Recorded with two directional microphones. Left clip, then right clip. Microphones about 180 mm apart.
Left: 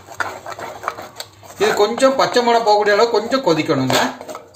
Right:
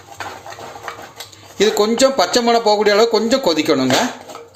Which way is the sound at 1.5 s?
40° right (ahead or behind).